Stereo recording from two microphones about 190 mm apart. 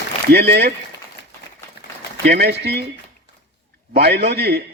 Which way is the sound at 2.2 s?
55° right (ahead or behind).